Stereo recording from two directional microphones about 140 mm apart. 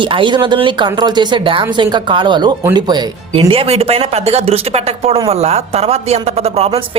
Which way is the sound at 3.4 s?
45° right (ahead or behind).